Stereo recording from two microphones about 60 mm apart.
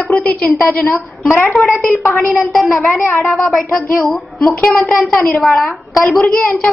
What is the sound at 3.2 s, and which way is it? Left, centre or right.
Speech, centre.